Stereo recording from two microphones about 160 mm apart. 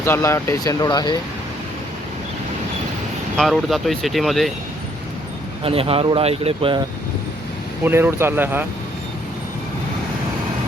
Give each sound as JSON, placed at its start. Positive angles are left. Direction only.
{"t": 0.0, "sound": "speech", "side_deg": 15}
{"t": 3.3, "sound": "speech", "side_deg": 0}
{"t": 5.6, "sound": "speech", "side_deg": -35}
{"t": 7.9, "sound": "speech", "side_deg": -15}